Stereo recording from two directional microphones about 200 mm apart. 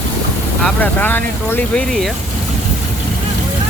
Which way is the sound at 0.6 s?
10° left (ahead or behind).